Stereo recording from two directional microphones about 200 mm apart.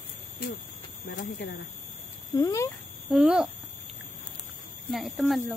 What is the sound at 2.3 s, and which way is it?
Speech, 15° left (ahead or behind).